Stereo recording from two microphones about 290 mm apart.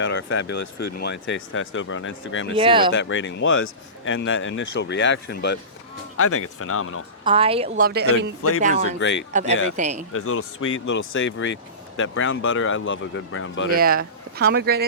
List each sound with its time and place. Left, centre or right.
0.0 s speech: left
2.6 s speech: centre
2.9 s speech: left
6.1 s speech: left
7.3 s a woman's voice: centre
7.9 s speech: right
8.4 s speech: left
9.0 s speech: left
9.3 s a woman's voice: right
10.1 s speech: left
13.7 s speech: right